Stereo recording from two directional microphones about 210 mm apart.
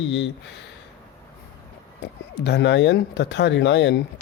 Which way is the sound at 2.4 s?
55° left (ahead or behind).